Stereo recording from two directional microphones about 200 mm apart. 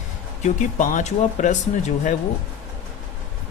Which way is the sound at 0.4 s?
40° left (ahead or behind).